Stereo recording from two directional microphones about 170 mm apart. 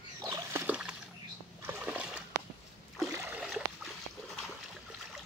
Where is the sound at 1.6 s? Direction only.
10° right (ahead or behind).